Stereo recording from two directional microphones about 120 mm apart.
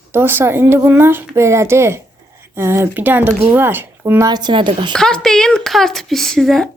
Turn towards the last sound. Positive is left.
turn(degrees=5)  # may be behind; listen again after turning